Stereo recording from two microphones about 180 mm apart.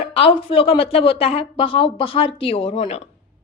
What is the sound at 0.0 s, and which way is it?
A woman's voice, 30° left (ahead or behind).